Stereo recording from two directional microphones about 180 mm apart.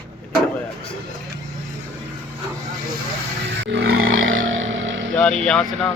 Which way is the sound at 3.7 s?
70° right (ahead or behind).